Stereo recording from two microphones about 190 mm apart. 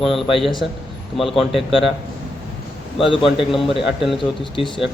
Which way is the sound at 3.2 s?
Centre (ahead or behind).